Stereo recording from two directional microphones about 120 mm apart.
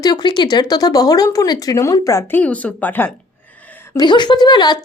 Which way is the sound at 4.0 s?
40° left (ahead or behind).